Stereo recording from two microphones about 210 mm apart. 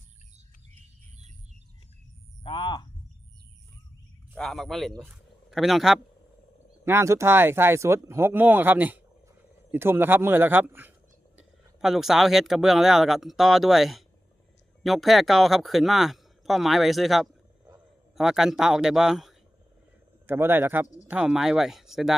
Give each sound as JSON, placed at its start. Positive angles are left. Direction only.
{"t": 2.4, "sound": "speech", "side_deg": 25}
{"t": 4.4, "sound": "speech", "side_deg": 0}
{"t": 6.8, "sound": "speech", "side_deg": -15}